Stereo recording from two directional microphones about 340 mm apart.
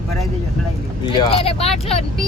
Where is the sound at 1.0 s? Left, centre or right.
Centre.